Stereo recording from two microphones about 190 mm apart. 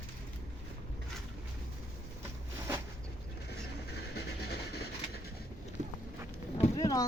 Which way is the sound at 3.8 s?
60° left (ahead or behind).